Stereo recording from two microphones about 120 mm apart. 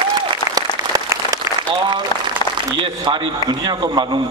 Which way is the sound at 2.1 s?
35° left (ahead or behind).